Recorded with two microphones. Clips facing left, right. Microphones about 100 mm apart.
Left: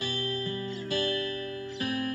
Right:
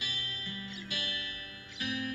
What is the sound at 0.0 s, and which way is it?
Music, 40° left (ahead or behind).